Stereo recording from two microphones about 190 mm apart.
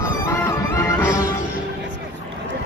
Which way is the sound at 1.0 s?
15° left (ahead or behind).